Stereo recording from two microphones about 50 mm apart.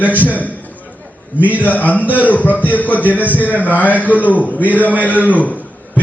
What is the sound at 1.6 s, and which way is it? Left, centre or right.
A man's voice, left.